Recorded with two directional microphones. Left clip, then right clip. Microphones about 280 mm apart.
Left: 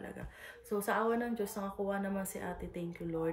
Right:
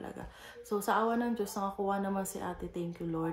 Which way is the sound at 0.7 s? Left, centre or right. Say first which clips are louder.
Right 2 dB; centre.